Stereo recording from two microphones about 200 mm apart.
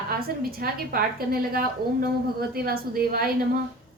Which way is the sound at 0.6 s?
45° right (ahead or behind).